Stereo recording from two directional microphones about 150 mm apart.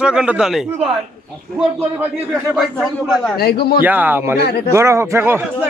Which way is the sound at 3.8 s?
10° right (ahead or behind).